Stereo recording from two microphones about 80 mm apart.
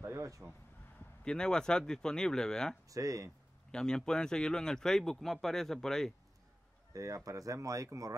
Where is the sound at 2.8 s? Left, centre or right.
Right.